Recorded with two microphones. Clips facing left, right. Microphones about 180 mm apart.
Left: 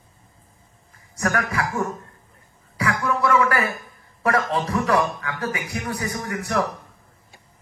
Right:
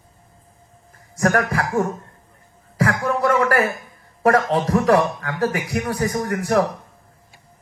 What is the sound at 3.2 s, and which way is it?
A man's voice, 40° right (ahead or behind).